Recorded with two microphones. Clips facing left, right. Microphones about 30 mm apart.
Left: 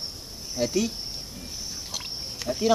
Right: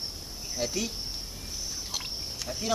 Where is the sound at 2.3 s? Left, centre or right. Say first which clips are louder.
Left 10 dB; centre.